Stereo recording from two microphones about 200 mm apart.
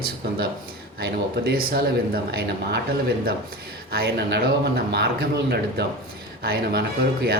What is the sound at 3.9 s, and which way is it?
A man's voice, 55° right (ahead or behind).